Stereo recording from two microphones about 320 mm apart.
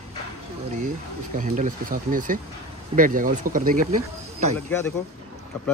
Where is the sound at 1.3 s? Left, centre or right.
Right.